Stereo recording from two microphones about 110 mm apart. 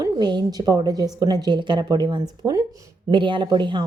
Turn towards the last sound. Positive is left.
turn(degrees=-45)  # may be behind; listen again after turning